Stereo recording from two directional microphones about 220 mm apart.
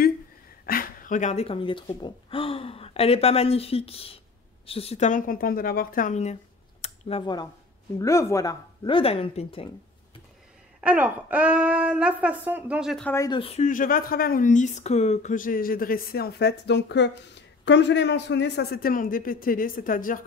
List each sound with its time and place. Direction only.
0.7 s speech: 40° left (ahead or behind)
6.8 s a sound: 25° left (ahead or behind)
8.0 s speech: 15° left (ahead or behind)
10.8 s speech: 5° right (ahead or behind)
13.1 s speech: 15° left (ahead or behind)
13.4 s speech: 30° left (ahead or behind)